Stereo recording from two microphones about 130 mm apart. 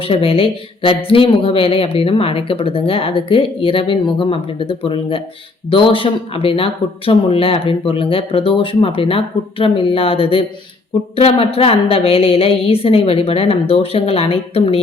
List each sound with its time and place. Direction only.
0.1 s speech: 45° left (ahead or behind)